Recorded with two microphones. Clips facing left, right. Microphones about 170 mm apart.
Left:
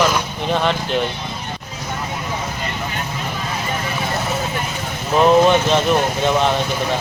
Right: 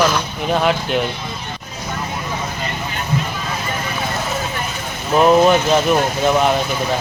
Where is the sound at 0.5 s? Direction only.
5° right (ahead or behind).